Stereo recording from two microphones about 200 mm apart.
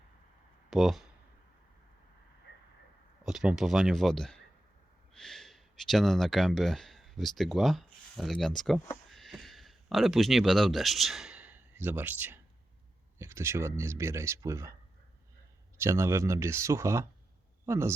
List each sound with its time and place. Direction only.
0.7 s speech: centre (ahead or behind)
3.2 s speech: centre (ahead or behind)
15.8 s speech: 15° right (ahead or behind)